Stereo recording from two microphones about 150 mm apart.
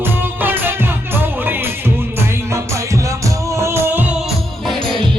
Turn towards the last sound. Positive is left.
turn(degrees=-15)  # may be behind; listen again after turning